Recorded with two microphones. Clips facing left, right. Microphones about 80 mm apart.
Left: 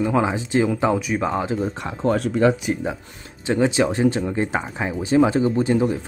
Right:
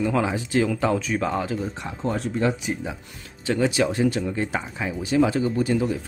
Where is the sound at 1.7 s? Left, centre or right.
Left.